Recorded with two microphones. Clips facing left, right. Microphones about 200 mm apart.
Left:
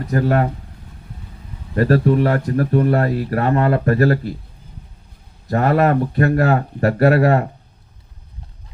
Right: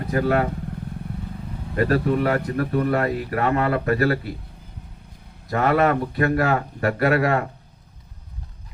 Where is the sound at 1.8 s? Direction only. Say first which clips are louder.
Left 5 dB; 40° left (ahead or behind).